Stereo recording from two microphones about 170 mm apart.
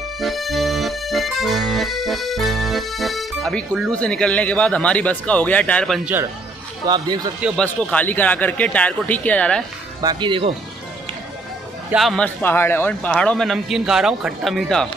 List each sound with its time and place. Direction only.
0.2 s accordion: centre (ahead or behind)
6.9 s speech: 25° right (ahead or behind)
7.5 s speech: 5° left (ahead or behind)
10.0 s speech: 30° right (ahead or behind)
11.9 s speech: centre (ahead or behind)